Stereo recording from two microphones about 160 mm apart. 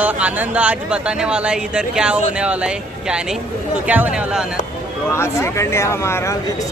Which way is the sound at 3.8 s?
10° right (ahead or behind).